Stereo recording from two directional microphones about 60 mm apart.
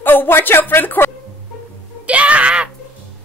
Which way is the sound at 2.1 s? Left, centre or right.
Right.